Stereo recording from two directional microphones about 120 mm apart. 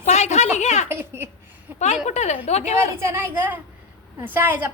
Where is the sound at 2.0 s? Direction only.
70° left (ahead or behind).